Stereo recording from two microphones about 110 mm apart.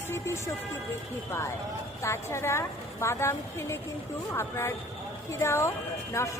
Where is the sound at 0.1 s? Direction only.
25° left (ahead or behind).